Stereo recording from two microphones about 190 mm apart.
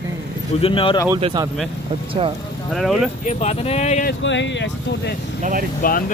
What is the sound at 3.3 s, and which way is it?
Speech, 35° left (ahead or behind).